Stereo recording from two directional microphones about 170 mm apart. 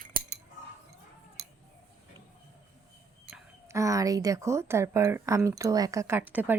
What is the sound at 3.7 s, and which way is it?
Speech, 20° right (ahead or behind).